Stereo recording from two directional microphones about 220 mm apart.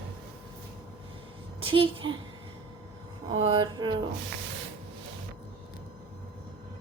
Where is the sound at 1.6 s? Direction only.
25° right (ahead or behind).